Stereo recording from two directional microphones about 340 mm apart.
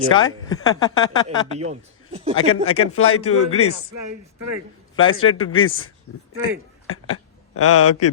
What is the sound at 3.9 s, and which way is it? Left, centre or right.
Speech, right.